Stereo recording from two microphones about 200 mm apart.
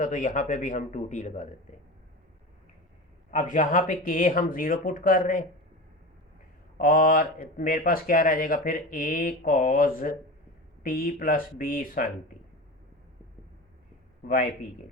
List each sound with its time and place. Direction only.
0.0 s speech: 40° left (ahead or behind)
3.3 s speech: 40° left (ahead or behind)
6.7 s speech: 45° left (ahead or behind)